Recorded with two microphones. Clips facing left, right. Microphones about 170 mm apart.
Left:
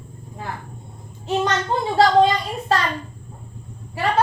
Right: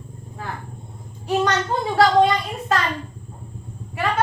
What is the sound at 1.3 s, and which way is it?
A woman's voice, 25° left (ahead or behind).